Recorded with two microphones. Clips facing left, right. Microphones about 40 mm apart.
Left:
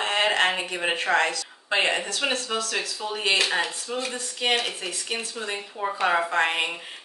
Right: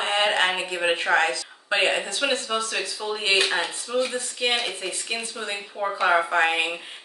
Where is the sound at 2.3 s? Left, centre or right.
Centre.